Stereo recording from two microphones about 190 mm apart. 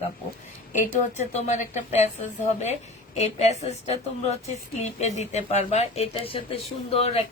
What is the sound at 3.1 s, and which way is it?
A woman's voice, 35° left (ahead or behind).